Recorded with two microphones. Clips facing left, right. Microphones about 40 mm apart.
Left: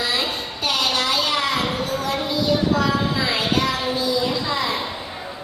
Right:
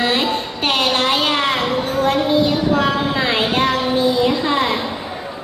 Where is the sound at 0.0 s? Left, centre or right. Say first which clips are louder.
Right 6 dB; right.